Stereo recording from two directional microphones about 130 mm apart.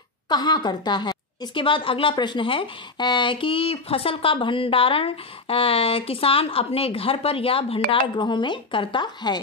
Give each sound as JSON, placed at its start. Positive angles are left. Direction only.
{"t": 0.3, "sound": "a woman's voice", "side_deg": 35}